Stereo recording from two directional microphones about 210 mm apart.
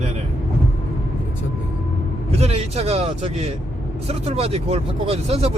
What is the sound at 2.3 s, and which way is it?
Speech, 30° right (ahead or behind).